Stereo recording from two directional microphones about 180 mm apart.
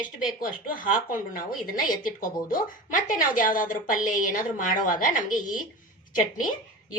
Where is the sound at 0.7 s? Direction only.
50° left (ahead or behind).